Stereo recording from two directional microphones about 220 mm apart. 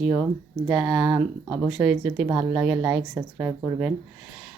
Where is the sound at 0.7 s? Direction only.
Centre (ahead or behind).